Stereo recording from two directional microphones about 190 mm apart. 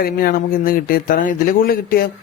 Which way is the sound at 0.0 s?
50° left (ahead or behind).